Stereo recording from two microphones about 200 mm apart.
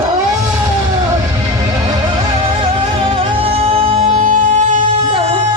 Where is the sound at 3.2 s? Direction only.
30° right (ahead or behind).